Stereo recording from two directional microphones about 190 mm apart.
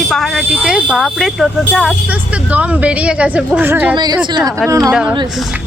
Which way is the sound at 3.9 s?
20° right (ahead or behind).